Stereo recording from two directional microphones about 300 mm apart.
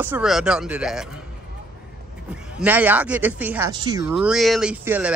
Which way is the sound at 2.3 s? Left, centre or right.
Centre.